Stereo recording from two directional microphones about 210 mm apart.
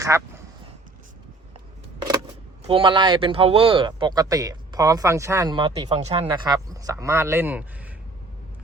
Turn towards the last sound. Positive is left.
turn(degrees=-10)  # may be behind; listen again after turning